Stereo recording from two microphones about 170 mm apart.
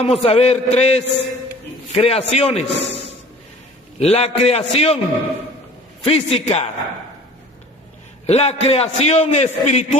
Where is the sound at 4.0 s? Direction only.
40° left (ahead or behind).